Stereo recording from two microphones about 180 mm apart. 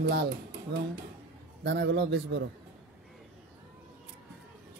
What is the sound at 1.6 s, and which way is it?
Speech, 75° right (ahead or behind).